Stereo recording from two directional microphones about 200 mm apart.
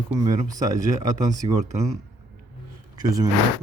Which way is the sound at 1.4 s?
30° right (ahead or behind).